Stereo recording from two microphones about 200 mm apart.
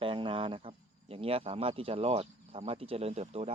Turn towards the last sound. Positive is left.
turn(degrees=-30)  # may be behind; listen again after turning